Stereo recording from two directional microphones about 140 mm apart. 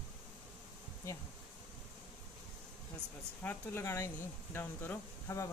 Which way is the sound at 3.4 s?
20° left (ahead or behind).